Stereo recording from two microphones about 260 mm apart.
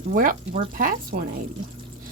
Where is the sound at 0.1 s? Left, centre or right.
Right.